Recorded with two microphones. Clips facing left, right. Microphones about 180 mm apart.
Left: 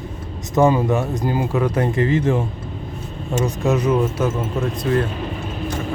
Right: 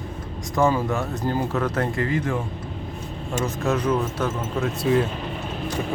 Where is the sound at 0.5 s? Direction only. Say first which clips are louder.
Left 5 dB; 20° left (ahead or behind).